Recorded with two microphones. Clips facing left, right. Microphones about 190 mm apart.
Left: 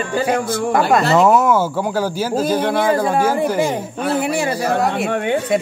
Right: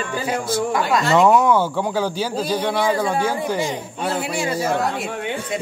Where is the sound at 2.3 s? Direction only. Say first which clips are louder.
Left 8 dB; 50° left (ahead or behind).